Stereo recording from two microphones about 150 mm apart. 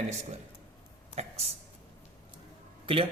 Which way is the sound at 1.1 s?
45° right (ahead or behind).